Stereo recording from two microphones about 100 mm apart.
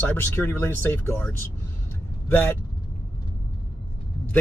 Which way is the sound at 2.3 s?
20° left (ahead or behind).